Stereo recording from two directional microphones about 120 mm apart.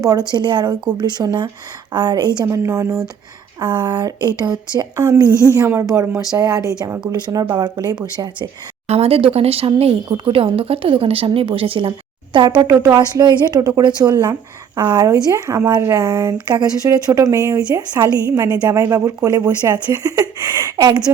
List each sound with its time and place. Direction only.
0.0 s speech: 35° right (ahead or behind)
2.5 s speech: 25° right (ahead or behind)
3.6 s speech: 40° right (ahead or behind)
8.9 s speech: 55° right (ahead or behind); by 12.7 s 40° right (ahead or behind)
12.7 s speech: 30° right (ahead or behind)
16.6 s speech: 30° right (ahead or behind)